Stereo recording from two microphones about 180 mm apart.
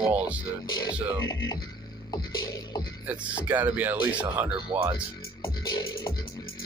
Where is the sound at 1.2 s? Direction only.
20° left (ahead or behind).